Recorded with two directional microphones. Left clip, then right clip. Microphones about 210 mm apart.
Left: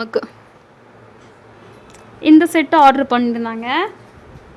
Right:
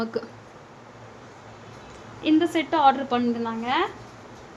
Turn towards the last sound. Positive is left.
turn(degrees=55)  # may be behind; listen again after turning